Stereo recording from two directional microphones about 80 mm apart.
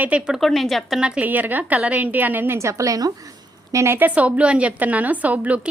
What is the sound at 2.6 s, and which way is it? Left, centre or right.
A woman's voice, right.